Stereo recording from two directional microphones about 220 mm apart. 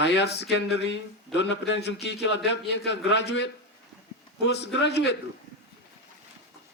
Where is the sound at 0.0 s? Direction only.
50° left (ahead or behind).